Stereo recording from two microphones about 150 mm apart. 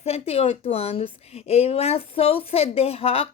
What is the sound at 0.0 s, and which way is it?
A woman's voice, 45° left (ahead or behind).